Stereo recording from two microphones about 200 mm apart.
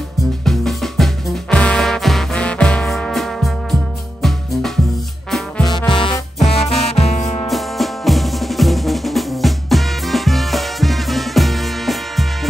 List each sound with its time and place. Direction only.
0.5 s music: centre (ahead or behind)
5.6 s music: 20° left (ahead or behind)
7.4 s drum: centre (ahead or behind)